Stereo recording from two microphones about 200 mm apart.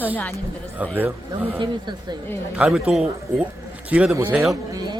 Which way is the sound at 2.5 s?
5° right (ahead or behind).